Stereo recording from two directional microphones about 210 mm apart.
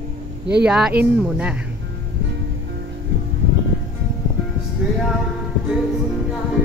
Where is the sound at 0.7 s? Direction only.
5° right (ahead or behind).